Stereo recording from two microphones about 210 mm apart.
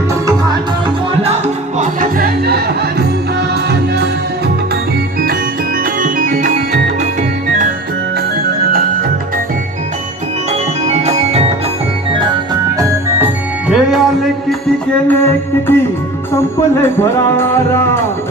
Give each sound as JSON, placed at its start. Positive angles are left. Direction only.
{"t": 1.8, "sound": "music", "side_deg": -40}
{"t": 6.0, "sound": "music", "side_deg": -40}
{"t": 10.8, "sound": "music", "side_deg": -30}
{"t": 12.8, "sound": "music", "side_deg": -10}
{"t": 15.0, "sound": "music", "side_deg": 10}